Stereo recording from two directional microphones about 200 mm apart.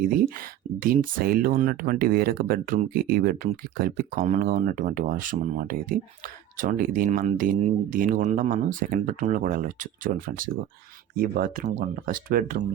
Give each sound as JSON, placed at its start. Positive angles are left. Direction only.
{"t": 0.0, "sound": "speech", "side_deg": -45}